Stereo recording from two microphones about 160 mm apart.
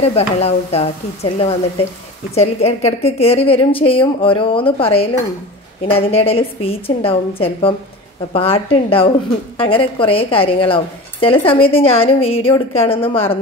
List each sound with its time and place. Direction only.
0.0 s a woman's voice: 40° left (ahead or behind)